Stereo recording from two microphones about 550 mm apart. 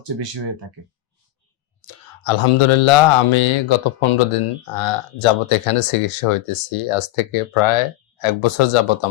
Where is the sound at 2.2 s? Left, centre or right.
Left.